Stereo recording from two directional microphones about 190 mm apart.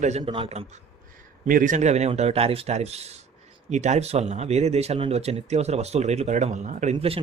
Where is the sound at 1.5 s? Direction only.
45° right (ahead or behind).